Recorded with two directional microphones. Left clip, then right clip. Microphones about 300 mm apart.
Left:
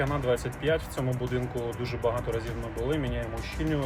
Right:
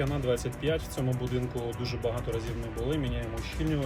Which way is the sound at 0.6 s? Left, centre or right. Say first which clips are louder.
Left 3 dB; left.